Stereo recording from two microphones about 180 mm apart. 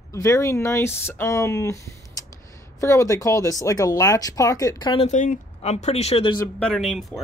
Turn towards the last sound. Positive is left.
turn(degrees=0)  # may be behind; listen again after turning